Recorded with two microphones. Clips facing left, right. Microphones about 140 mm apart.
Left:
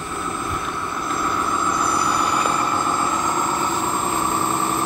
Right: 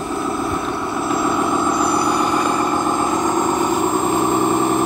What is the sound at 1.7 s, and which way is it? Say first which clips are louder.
Vehicle: right 4 dB; 25° right (ahead or behind).